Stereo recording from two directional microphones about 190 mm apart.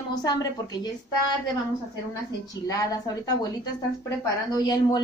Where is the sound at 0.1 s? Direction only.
20° left (ahead or behind).